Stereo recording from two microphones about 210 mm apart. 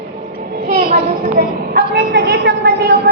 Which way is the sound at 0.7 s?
40° right (ahead or behind).